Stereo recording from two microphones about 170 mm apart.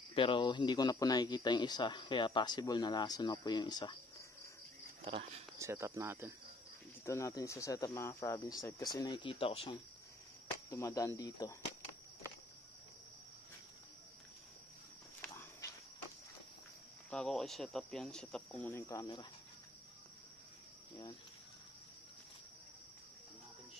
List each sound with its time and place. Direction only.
0.1 s speech: 30° left (ahead or behind)
5.0 s speech: 35° right (ahead or behind)
5.6 s speech: 15° right (ahead or behind)
7.1 s speech: 20° left (ahead or behind)
10.7 s speech: 15° left (ahead or behind)
15.2 s walk: 15° left (ahead or behind)
17.1 s speech: 5° left (ahead or behind); by 19.2 s 25° left (ahead or behind)